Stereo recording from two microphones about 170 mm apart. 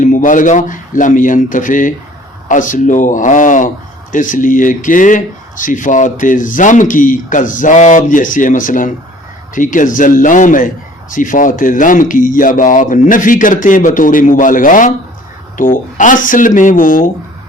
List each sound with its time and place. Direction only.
0.0 s speech: 50° left (ahead or behind)